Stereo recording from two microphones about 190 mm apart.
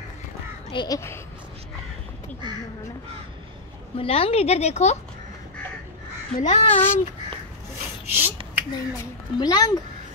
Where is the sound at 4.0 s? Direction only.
30° left (ahead or behind).